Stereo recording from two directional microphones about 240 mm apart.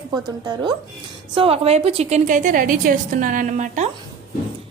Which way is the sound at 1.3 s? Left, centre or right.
Right.